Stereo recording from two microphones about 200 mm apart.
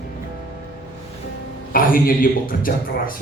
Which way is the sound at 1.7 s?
45° left (ahead or behind).